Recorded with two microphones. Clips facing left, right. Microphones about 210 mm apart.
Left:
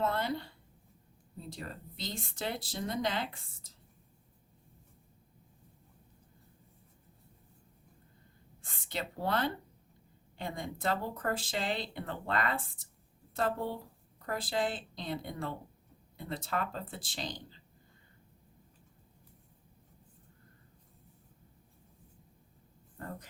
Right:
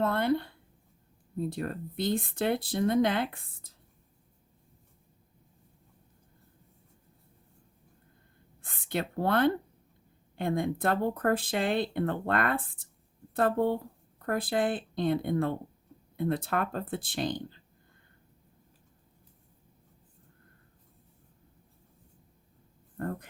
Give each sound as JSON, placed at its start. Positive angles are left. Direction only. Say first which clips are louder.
{"t": 0.0, "sound": "speech", "louder": "right 6 dB", "side_deg": -55}
{"t": 8.6, "sound": "a woman's voice", "louder": "right 7 dB", "side_deg": -55}
{"t": 23.0, "sound": "a sound", "louder": "right 9 dB", "side_deg": -55}